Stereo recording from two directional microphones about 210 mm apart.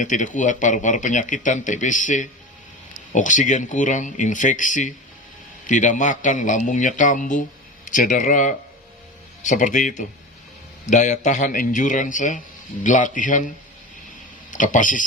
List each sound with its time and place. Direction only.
0.0 s speech: 35° left (ahead or behind)
14.5 s speech: 40° left (ahead or behind)